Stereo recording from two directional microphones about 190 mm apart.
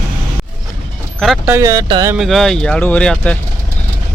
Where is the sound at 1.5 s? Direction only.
15° right (ahead or behind).